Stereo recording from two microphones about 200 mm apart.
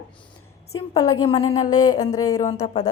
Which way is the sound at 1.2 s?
30° left (ahead or behind).